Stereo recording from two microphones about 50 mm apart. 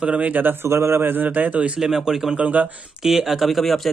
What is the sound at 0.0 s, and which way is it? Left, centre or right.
Speech, right.